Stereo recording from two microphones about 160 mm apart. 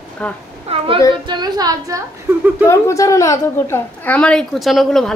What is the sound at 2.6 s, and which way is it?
A woman's voice, 20° left (ahead or behind).